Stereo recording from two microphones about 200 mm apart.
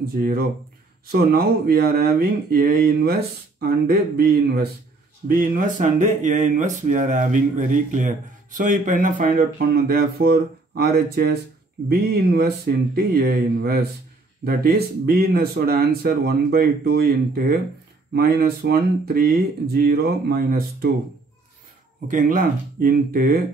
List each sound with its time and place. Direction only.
0.0 s speech: 50° right (ahead or behind)
22.0 s speech: 40° right (ahead or behind)